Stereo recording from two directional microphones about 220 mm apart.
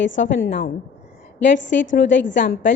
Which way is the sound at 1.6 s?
55° left (ahead or behind).